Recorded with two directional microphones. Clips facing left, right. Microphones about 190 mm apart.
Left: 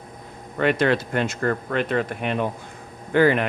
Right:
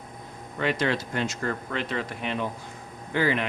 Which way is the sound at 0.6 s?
60° left (ahead or behind).